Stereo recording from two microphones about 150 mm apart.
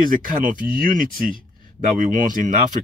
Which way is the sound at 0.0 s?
65° right (ahead or behind).